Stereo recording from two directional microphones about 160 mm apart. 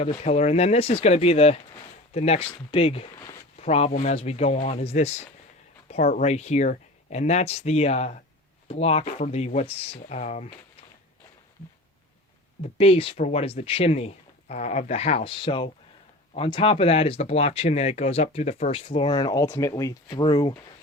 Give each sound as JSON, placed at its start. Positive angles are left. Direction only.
{"t": 0.0, "sound": "speech", "side_deg": 40}
{"t": 3.2, "sound": "a sound", "side_deg": 20}
{"t": 3.6, "sound": "speech", "side_deg": 40}
{"t": 12.6, "sound": "speech", "side_deg": 40}